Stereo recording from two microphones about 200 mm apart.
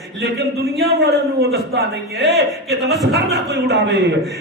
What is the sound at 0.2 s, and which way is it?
A man's voice, 55° right (ahead or behind).